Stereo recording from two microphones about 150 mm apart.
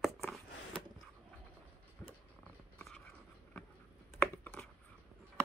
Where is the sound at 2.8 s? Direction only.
5° left (ahead or behind).